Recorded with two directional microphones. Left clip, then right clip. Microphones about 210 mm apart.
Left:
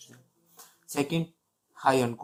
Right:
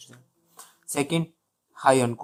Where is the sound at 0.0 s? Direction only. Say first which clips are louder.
Right 3 dB; 35° right (ahead or behind).